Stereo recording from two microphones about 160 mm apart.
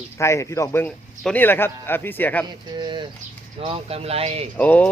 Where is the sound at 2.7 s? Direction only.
30° right (ahead or behind).